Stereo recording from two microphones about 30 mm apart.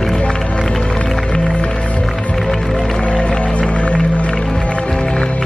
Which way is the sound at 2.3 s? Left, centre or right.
Centre.